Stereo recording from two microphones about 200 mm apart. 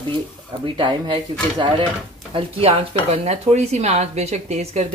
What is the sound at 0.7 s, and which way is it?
Speech, 25° right (ahead or behind).